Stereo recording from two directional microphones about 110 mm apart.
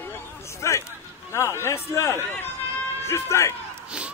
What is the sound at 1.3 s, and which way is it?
A man's voice, 25° left (ahead or behind).